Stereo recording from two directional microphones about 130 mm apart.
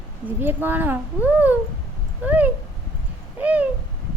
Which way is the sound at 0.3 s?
15° right (ahead or behind).